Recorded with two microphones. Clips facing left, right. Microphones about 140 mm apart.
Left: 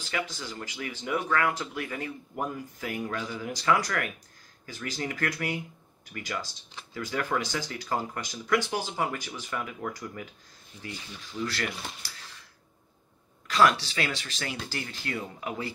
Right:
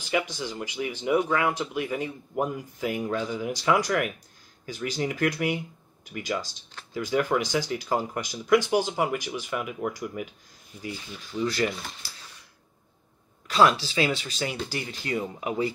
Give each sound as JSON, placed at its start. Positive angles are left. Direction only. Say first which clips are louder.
{"t": 0.1, "sound": "speech", "louder": "right 6 dB", "side_deg": -15}
{"t": 11.3, "sound": "speech", "louder": "right 5 dB", "side_deg": -10}
{"t": 13.5, "sound": "speech", "louder": "right 2 dB", "side_deg": -25}